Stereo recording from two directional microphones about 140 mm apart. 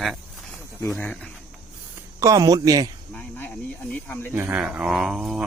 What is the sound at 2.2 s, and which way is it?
Speech, 25° right (ahead or behind).